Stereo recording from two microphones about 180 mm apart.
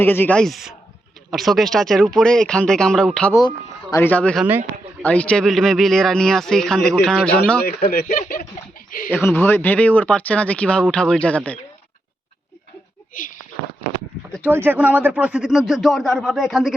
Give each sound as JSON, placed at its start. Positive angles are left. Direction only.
{"t": 0.0, "sound": "a man's voice", "side_deg": 10}
{"t": 7.6, "sound": "speech", "side_deg": 60}
{"t": 9.0, "sound": "speech", "side_deg": 10}
{"t": 13.1, "sound": "speech", "side_deg": 50}
{"t": 14.3, "sound": "a man's voice", "side_deg": -10}